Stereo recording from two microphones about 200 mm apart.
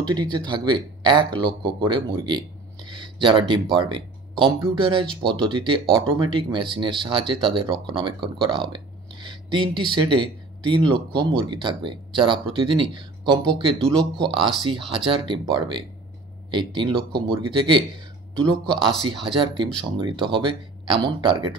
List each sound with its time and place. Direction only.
0.0 s speech: 20° right (ahead or behind)